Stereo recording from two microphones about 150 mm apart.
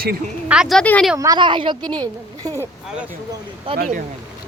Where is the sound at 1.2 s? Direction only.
30° right (ahead or behind).